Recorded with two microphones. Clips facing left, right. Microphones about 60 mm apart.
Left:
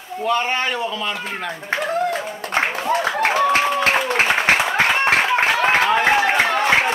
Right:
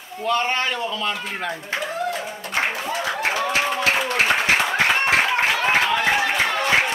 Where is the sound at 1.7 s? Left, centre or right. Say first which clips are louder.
Left 7 dB; left.